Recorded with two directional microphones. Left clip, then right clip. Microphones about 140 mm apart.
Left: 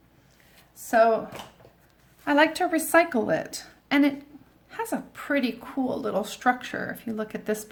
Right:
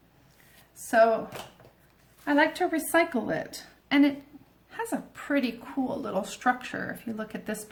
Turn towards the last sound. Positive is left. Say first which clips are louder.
# left 5 dB
turn(degrees=35)  # may be behind; listen again after turning